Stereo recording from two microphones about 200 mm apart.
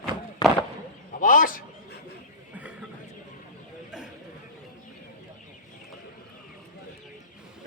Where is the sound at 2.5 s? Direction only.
5° right (ahead or behind).